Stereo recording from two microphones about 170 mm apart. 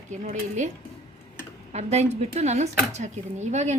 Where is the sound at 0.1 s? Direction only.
45° right (ahead or behind).